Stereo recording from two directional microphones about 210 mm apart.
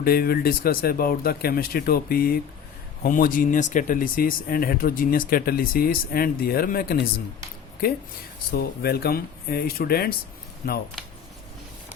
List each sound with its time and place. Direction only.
0.0 s speech: 45° left (ahead or behind)